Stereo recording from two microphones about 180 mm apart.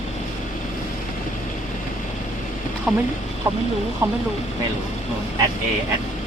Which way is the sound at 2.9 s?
5° right (ahead or behind).